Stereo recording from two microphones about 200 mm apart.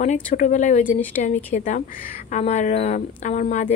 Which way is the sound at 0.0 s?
40° left (ahead or behind).